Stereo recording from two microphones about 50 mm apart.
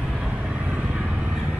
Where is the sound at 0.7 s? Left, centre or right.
Right.